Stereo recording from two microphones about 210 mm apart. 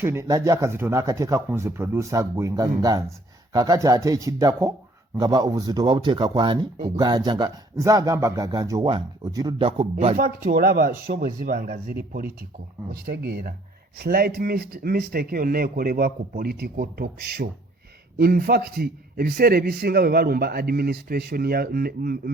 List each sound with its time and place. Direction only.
0.0 s speech: 10° right (ahead or behind)
10.2 s a man's voice: 40° right (ahead or behind)